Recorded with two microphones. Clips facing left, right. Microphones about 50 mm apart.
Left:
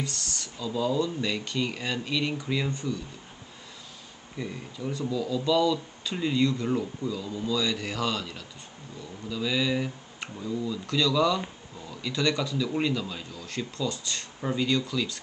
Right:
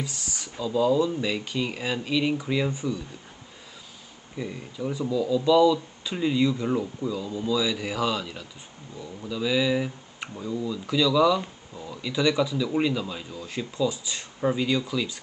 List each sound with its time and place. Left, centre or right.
0.0 s speech: centre
4.4 s speech: centre